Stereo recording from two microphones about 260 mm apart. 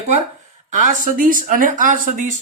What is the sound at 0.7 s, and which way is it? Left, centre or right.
Speech, right.